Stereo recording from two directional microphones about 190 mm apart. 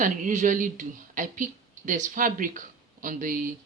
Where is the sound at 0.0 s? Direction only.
40° right (ahead or behind).